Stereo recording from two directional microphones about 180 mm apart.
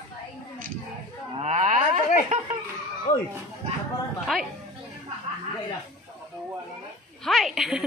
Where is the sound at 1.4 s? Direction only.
40° right (ahead or behind).